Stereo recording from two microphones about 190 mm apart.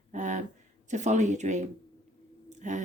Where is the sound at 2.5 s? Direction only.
40° right (ahead or behind).